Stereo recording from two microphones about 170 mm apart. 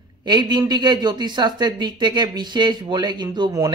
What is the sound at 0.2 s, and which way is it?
Speech, 25° right (ahead or behind).